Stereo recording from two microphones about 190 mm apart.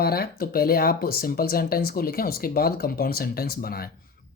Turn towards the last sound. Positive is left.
turn(degrees=50)  # may be behind; listen again after turning